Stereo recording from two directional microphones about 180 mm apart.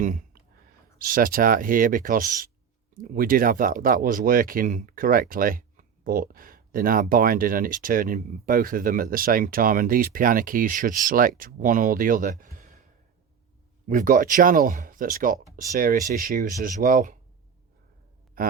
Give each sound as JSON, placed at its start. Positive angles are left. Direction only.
{"t": 0.0, "sound": "speech", "side_deg": -45}
{"t": 13.8, "sound": "speech", "side_deg": -45}